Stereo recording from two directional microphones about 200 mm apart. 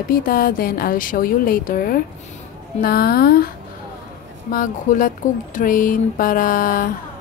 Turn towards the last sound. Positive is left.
turn(degrees=45)  # may be behind; listen again after turning